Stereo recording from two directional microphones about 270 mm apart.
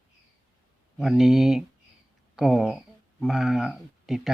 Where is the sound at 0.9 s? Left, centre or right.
Centre.